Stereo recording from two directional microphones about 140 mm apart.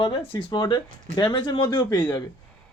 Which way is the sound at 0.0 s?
40° left (ahead or behind).